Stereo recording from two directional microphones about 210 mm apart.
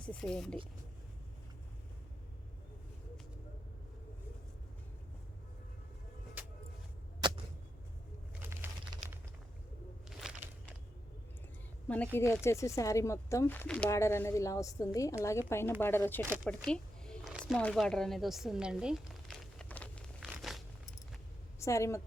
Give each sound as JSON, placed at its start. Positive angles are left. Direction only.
{"t": 0.0, "sound": "speech", "side_deg": 5}
{"t": 6.4, "sound": "vehicle", "side_deg": -10}
{"t": 7.2, "sound": "a sound", "side_deg": -20}
{"t": 8.4, "sound": "crumpling", "side_deg": -10}
{"t": 10.1, "sound": "a sound", "side_deg": 0}
{"t": 11.9, "sound": "speech", "side_deg": 10}
{"t": 16.2, "sound": "speech", "side_deg": -10}
{"t": 16.5, "sound": "speech", "side_deg": 5}
{"t": 19.5, "sound": "a sound", "side_deg": 5}
{"t": 21.6, "sound": "a woman's voice", "side_deg": 15}